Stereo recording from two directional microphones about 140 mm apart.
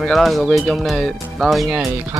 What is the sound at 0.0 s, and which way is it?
Speech, centre (ahead or behind).